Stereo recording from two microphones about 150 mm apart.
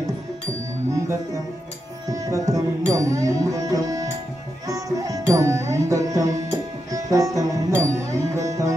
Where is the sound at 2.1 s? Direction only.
20° right (ahead or behind).